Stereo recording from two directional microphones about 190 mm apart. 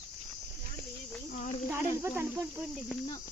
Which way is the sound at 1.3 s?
40° left (ahead or behind).